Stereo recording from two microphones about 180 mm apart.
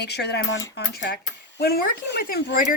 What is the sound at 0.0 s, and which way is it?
Speech, 65° left (ahead or behind).